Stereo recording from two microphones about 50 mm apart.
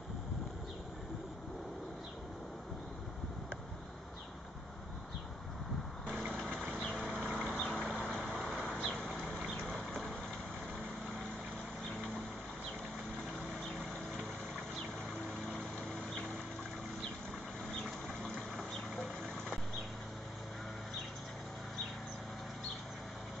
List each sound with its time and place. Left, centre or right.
6.7 s vehicle: left
7.2 s vehicle: centre
7.5 s a sound: centre
8.2 s vehicle: centre